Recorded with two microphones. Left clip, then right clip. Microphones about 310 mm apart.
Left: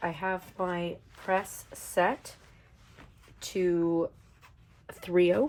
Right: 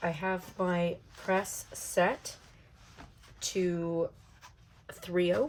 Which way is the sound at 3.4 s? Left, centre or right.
Centre.